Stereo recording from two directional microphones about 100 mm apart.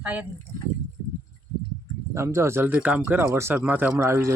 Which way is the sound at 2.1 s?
30° right (ahead or behind).